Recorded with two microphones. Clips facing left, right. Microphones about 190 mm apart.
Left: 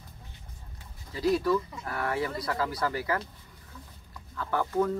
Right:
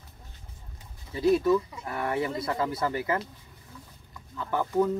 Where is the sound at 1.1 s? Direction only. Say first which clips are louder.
Right 3 dB; 20° right (ahead or behind).